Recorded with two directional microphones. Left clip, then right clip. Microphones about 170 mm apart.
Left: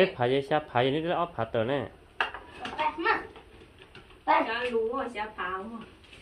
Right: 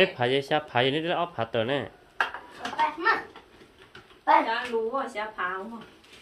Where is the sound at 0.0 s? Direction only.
20° right (ahead or behind).